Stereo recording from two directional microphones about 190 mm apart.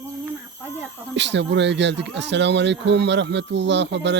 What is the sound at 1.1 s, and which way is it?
Speech, 70° right (ahead or behind).